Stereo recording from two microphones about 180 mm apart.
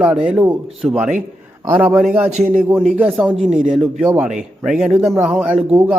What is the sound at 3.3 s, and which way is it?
Speech, 35° right (ahead or behind).